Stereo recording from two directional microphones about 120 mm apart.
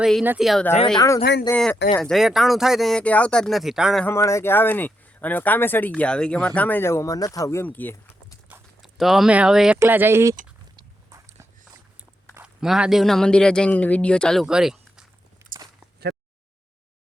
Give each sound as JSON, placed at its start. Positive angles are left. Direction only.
{"t": 0.0, "sound": "speech", "side_deg": -5}
{"t": 1.0, "sound": "speech", "side_deg": 25}
{"t": 2.0, "sound": "speech", "side_deg": 0}
{"t": 4.1, "sound": "speech", "side_deg": 25}
{"t": 8.8, "sound": "speech", "side_deg": 0}
{"t": 9.7, "sound": "speech", "side_deg": -20}
{"t": 12.4, "sound": "speech", "side_deg": -5}
{"t": 15.4, "sound": "walk", "side_deg": -25}